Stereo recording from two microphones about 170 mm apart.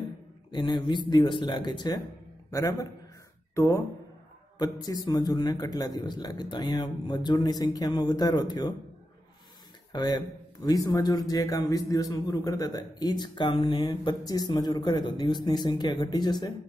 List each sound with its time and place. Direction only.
0.5 s a man's voice: 30° left (ahead or behind)
4.8 s a man's voice: 20° left (ahead or behind)
9.9 s a man's voice: 20° left (ahead or behind)